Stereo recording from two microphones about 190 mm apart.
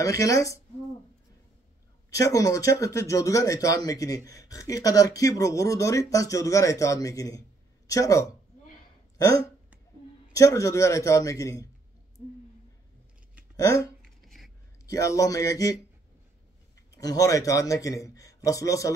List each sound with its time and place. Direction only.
0.0 s speech: 15° left (ahead or behind)
2.0 s speech: 20° left (ahead or behind)
10.3 s speech: 15° left (ahead or behind)
13.6 s speech: 15° left (ahead or behind)
14.0 s a sound: centre (ahead or behind)
14.9 s speech: 15° left (ahead or behind)
16.9 s speech: 20° left (ahead or behind)